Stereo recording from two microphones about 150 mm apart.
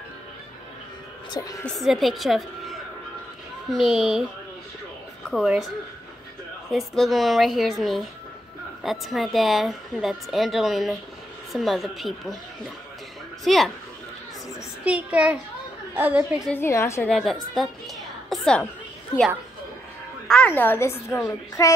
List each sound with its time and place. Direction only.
1.3 s a woman's voice: 25° left (ahead or behind)
1.6 s speech: centre (ahead or behind)
5.3 s speech: centre (ahead or behind)
6.7 s speech: centre (ahead or behind)
9.1 s a woman's voice: centre (ahead or behind)
14.9 s a woman's voice: 10° right (ahead or behind)
16.4 s a woman's voice: 15° left (ahead or behind)
17.1 s a woman's voice: centre (ahead or behind)
20.2 s a woman's voice: 10° left (ahead or behind)